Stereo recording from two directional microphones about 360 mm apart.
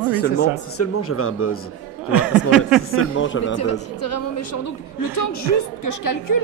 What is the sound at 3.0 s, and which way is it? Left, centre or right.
A woman's voice, left.